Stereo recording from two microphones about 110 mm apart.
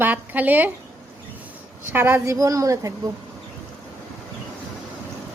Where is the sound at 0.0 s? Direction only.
15° right (ahead or behind).